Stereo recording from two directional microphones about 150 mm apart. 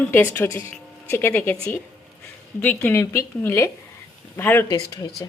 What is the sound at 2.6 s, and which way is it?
A woman's voice, 10° left (ahead or behind).